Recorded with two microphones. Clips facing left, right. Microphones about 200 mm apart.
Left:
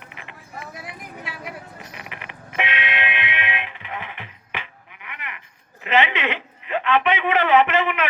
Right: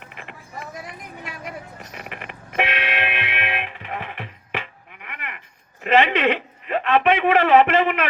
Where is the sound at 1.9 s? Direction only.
50° right (ahead or behind).